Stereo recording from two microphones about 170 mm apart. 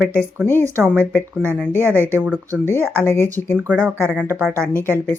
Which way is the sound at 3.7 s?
5° right (ahead or behind).